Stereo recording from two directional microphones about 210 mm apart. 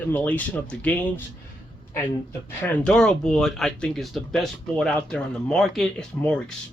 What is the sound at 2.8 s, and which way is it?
Speech, 5° left (ahead or behind).